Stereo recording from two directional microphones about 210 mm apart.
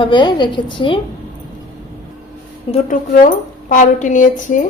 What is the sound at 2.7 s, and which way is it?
A woman's voice, 35° left (ahead or behind).